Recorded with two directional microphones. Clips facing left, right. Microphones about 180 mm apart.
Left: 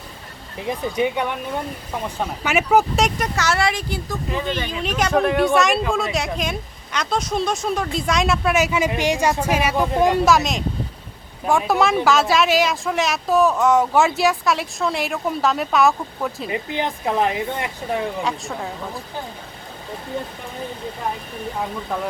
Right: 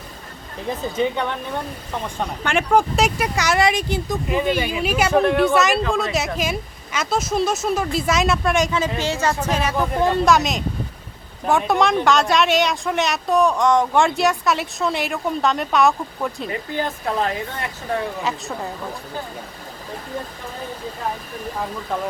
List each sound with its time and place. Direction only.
0.7 s speech: 15° left (ahead or behind); by 3.2 s centre (ahead or behind)
3.3 s speech: 15° right (ahead or behind); by 10.2 s 15° left (ahead or behind)
10.2 s speech: centre (ahead or behind)
16.5 s speech: 20° left (ahead or behind)
18.2 s speech: centre (ahead or behind)